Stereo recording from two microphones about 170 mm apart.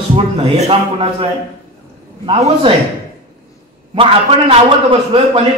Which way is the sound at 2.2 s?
35° right (ahead or behind).